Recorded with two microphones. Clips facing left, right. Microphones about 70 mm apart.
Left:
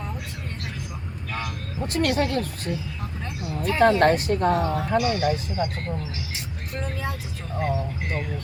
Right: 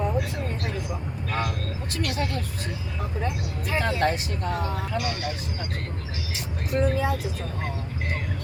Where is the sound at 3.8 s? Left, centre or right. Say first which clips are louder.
Left 9 dB; left.